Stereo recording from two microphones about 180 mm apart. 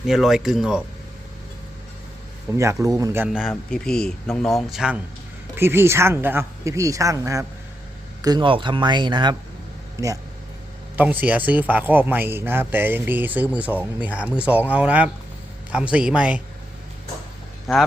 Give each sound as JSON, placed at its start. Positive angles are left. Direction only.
{"t": 0.1, "sound": "speech", "side_deg": 0}
{"t": 2.5, "sound": "speech", "side_deg": -15}
{"t": 5.5, "sound": "speech", "side_deg": -15}
{"t": 10.9, "sound": "speech", "side_deg": -10}
{"t": 17.7, "sound": "speech", "side_deg": 0}